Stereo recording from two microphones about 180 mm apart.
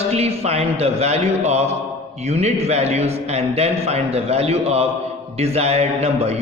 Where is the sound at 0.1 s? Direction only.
35° right (ahead or behind).